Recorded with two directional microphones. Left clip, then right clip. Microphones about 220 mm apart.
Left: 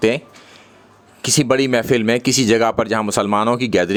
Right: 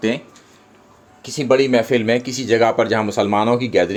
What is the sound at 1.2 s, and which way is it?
Speech, 40° left (ahead or behind).